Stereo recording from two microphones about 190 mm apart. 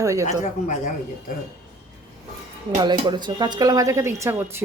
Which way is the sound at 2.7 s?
25° right (ahead or behind).